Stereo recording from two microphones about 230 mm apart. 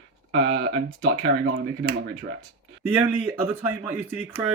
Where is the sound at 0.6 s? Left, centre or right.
Right.